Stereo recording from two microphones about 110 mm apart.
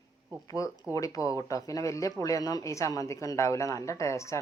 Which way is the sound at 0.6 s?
30° left (ahead or behind).